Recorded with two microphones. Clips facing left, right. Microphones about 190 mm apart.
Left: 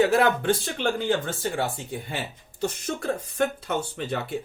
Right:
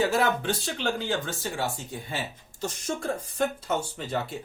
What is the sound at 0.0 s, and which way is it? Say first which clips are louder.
Speech: left 4 dB; 55° left (ahead or behind).